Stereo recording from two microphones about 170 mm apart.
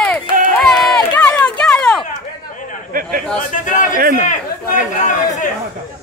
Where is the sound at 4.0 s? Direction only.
55° right (ahead or behind).